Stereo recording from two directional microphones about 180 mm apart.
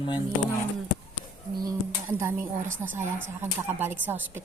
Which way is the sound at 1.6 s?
15° right (ahead or behind).